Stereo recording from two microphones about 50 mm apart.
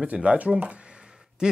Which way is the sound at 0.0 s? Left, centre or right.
Right.